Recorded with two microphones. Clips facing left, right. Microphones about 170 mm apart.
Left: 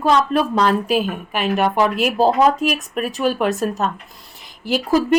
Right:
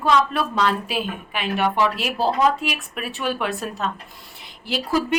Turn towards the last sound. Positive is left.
turn(degrees=45)  # may be behind; listen again after turning